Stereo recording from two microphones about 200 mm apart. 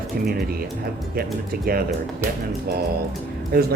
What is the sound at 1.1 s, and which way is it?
Speech, 50° right (ahead or behind).